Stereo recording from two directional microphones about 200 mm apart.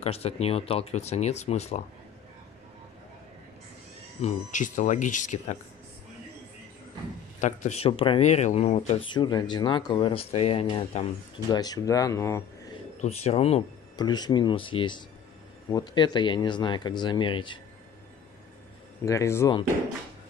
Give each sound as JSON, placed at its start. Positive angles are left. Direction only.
{"t": 0.0, "sound": "speech", "side_deg": 30}
{"t": 4.2, "sound": "speech", "side_deg": 40}
{"t": 7.3, "sound": "speech", "side_deg": 35}
{"t": 13.0, "sound": "speech", "side_deg": 30}
{"t": 19.0, "sound": "speech", "side_deg": 15}